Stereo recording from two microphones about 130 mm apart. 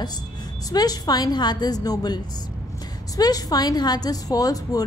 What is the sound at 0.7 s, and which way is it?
A woman's voice, 30° left (ahead or behind).